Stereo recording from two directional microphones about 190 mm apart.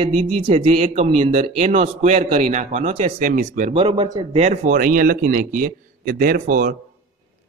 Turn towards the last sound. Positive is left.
turn(degrees=-45)  # may be behind; listen again after turning